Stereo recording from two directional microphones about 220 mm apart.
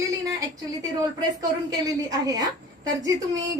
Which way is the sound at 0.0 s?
15° right (ahead or behind).